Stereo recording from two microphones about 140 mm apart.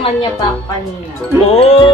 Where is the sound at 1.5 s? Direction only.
45° left (ahead or behind).